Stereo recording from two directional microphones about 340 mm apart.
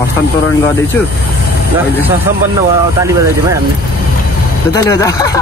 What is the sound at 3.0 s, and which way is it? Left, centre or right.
Speech, centre.